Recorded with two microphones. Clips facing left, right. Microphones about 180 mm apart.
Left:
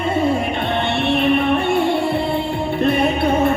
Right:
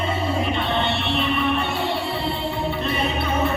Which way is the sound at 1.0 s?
55° left (ahead or behind).